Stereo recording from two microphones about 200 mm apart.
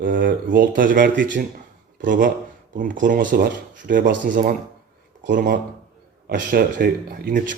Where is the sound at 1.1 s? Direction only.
65° right (ahead or behind).